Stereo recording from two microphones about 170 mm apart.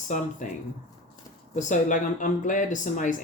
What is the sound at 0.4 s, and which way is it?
Speech, 45° left (ahead or behind).